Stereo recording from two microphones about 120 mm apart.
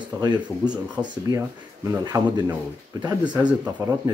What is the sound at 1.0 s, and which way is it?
Speech, 25° right (ahead or behind).